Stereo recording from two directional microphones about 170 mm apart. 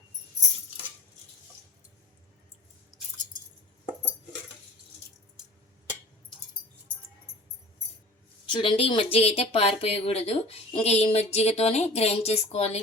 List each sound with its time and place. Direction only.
8.5 s speech: 30° left (ahead or behind)